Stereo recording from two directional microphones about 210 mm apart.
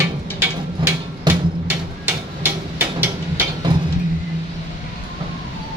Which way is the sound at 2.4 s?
10° right (ahead or behind).